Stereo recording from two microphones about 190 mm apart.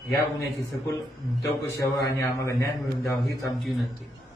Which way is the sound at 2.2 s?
15° left (ahead or behind).